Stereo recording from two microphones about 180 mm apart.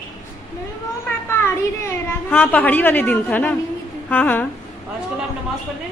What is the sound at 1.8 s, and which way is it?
A woman's voice, 10° left (ahead or behind).